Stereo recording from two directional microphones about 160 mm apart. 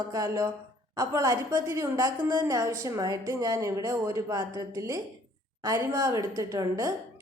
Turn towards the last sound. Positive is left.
turn(degrees=-20)  # may be behind; listen again after turning